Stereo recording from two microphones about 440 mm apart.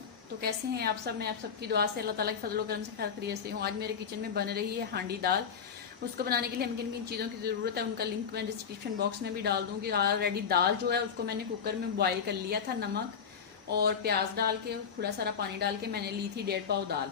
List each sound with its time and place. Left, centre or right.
0.4 s a woman's voice: right
13.7 s a woman's voice: right